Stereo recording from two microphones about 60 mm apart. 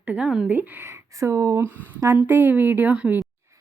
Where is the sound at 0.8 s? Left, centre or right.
Right.